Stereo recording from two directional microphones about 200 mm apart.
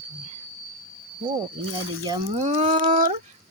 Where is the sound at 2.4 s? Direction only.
35° right (ahead or behind).